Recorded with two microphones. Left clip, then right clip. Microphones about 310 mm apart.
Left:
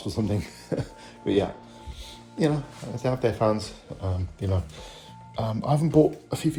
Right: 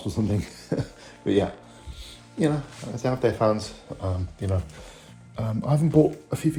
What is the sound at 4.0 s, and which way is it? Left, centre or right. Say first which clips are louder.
Speech: right 2 dB; right.